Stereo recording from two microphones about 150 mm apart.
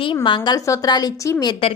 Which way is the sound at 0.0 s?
35° left (ahead or behind).